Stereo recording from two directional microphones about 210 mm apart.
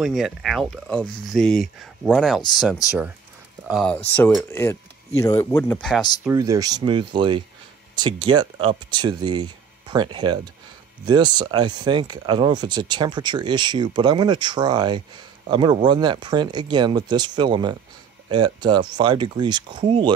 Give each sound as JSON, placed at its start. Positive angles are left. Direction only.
{"t": 0.0, "sound": "speech", "side_deg": 0}
{"t": 3.6, "sound": "speech", "side_deg": -5}
{"t": 4.1, "sound": "speech", "side_deg": 10}
{"t": 6.2, "sound": "speech", "side_deg": -15}